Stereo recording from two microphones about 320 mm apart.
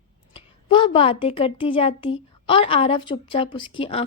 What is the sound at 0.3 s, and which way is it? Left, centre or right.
A woman's voice, centre.